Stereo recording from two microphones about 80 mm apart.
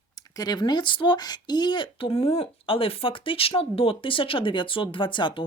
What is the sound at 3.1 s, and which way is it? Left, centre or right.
Speech, left.